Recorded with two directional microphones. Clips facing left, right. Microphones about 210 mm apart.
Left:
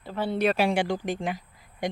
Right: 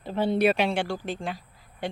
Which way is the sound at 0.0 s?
20° right (ahead or behind).